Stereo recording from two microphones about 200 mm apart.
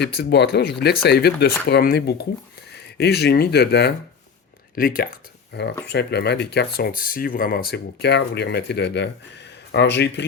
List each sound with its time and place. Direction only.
0.0 s speech: 50° left (ahead or behind)
4.7 s speech: 45° left (ahead or behind)